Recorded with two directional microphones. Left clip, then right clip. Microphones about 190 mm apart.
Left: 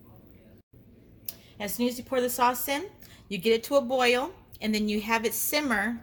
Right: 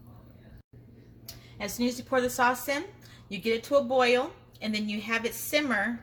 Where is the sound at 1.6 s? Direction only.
50° left (ahead or behind).